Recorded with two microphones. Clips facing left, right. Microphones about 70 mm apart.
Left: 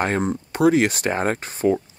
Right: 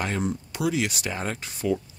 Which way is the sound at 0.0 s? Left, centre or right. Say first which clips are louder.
Left 6 dB; left.